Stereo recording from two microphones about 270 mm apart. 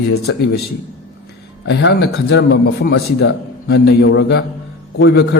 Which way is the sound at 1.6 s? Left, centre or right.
Left.